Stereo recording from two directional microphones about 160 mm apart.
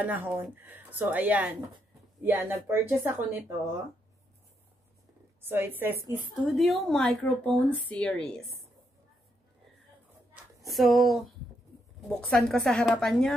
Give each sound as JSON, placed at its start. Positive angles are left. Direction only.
{"t": 0.0, "sound": "a woman's voice", "side_deg": -10}
{"t": 5.4, "sound": "a woman's voice", "side_deg": -15}
{"t": 6.4, "sound": "speech", "side_deg": 0}
{"t": 10.7, "sound": "speech", "side_deg": 0}